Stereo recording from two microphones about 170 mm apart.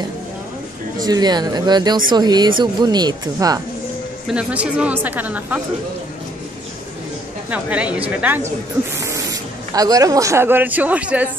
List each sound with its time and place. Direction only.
1.0 s speech: 25° right (ahead or behind)
4.3 s a woman's voice: 5° right (ahead or behind)
7.4 s a woman's voice: 10° right (ahead or behind)